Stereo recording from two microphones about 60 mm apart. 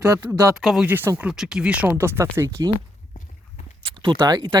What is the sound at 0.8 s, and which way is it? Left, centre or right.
Speech, right.